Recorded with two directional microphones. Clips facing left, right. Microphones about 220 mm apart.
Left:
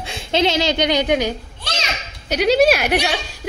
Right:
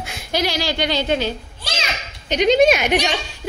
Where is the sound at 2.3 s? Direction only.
5° left (ahead or behind).